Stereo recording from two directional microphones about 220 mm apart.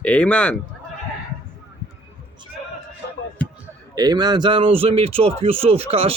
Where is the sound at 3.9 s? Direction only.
20° right (ahead or behind).